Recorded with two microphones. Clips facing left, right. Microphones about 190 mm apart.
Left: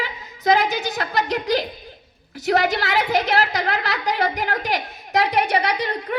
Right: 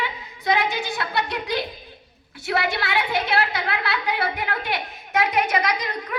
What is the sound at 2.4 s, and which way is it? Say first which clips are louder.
A woman's voice: left 5 dB; 40° left (ahead or behind).